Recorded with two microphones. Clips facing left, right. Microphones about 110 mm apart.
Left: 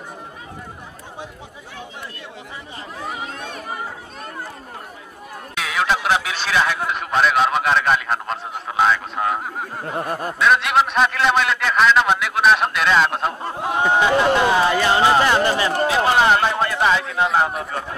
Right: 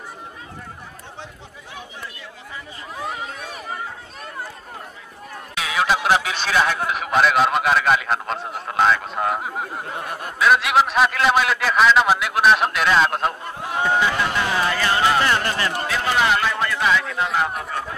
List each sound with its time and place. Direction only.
3.1 s a sound: 5° right (ahead or behind)
5.5 s a man's voice: centre (ahead or behind)
9.9 s speech: 40° left (ahead or behind)
10.4 s a man's voice: centre (ahead or behind)
13.8 s speech: 20° left (ahead or behind)
15.9 s speech: 35° left (ahead or behind)